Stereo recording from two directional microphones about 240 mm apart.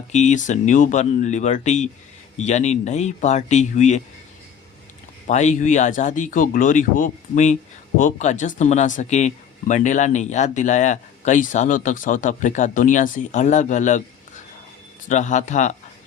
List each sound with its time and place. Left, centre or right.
0.1 s speech: left
5.3 s speech: left
15.1 s speech: left